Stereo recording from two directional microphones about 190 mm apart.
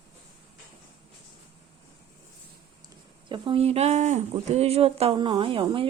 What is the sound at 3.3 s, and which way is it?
Speech, 25° right (ahead or behind).